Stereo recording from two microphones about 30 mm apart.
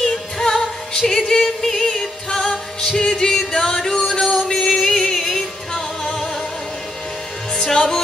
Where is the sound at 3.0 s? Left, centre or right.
Centre.